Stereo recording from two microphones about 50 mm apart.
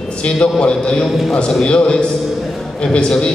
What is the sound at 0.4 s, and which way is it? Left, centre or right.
A man's voice, centre.